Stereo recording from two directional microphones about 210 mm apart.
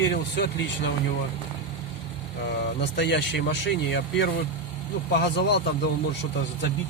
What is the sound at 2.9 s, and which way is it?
Speech, 55° left (ahead or behind).